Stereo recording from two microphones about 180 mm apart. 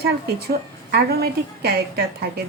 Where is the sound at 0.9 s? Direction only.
60° right (ahead or behind).